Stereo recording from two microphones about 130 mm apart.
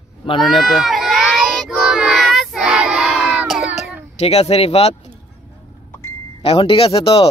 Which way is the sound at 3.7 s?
5° right (ahead or behind).